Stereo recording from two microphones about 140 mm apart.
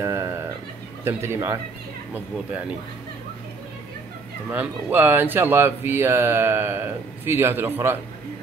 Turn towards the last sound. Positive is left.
turn(degrees=-15)  # may be behind; listen again after turning